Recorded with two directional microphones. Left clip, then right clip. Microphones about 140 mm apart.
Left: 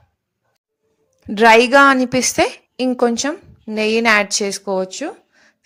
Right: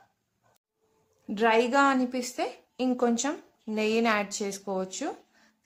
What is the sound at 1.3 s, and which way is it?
A woman's voice, 55° left (ahead or behind).